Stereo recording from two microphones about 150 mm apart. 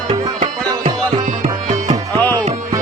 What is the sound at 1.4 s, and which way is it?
Music, 55° right (ahead or behind).